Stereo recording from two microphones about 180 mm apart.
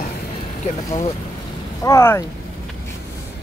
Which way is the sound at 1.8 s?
15° left (ahead or behind).